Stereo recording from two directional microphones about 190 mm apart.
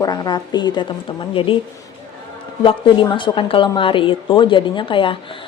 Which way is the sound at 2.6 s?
25° left (ahead or behind).